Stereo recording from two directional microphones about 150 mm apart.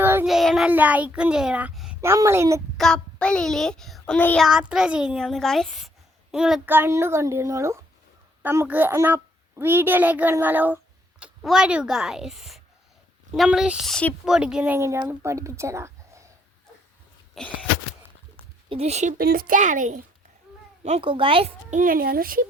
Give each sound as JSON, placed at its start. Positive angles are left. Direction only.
{"t": 0.0, "sound": "child singing", "side_deg": -15}
{"t": 0.3, "sound": "a child's voice", "side_deg": 0}
{"t": 2.0, "sound": "a woman's voice", "side_deg": -20}
{"t": 2.7, "sound": "a child's voice", "side_deg": 5}
{"t": 4.4, "sound": "a woman's voice", "side_deg": -5}
{"t": 17.4, "sound": "a woman's voice", "side_deg": 0}
{"t": 18.7, "sound": "a woman's voice", "side_deg": -45}
{"t": 19.1, "sound": "a child's voice", "side_deg": -75}
{"t": 21.0, "sound": "speech", "side_deg": -35}
{"t": 21.7, "sound": "speech", "side_deg": -65}